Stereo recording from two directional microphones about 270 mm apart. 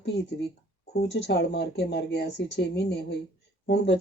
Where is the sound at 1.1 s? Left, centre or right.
Left.